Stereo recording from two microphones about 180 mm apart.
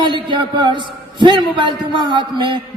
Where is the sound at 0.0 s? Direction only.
25° right (ahead or behind).